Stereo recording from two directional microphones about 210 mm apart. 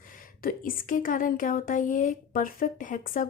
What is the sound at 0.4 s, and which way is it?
Speech, 40° left (ahead or behind).